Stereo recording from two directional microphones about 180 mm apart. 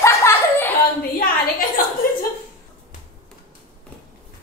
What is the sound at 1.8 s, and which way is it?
Chuckle, 55° left (ahead or behind).